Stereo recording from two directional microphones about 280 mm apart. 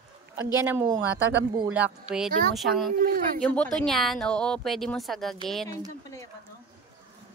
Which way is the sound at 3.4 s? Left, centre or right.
Centre.